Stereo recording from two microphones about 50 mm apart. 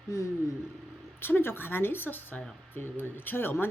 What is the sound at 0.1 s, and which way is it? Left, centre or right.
Speech, left.